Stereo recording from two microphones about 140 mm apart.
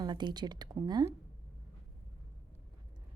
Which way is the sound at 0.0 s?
30° right (ahead or behind).